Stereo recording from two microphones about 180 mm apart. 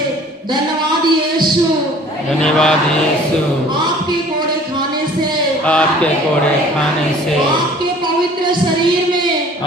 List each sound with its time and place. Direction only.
2.4 s speech: 5° left (ahead or behind)
5.6 s a man's voice: 5° left (ahead or behind)